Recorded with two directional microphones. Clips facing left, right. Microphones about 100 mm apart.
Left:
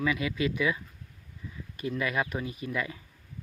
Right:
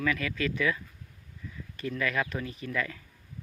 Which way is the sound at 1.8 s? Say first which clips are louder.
Left 1 dB; 20° left (ahead or behind).